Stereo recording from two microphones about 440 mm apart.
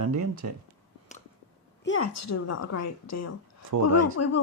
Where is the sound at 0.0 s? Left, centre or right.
Right.